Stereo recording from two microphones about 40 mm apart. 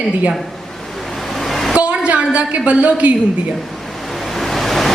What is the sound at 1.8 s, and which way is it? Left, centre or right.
A woman's voice, right.